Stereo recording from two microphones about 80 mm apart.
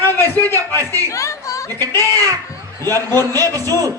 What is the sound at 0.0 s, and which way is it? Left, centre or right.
Chatter, left.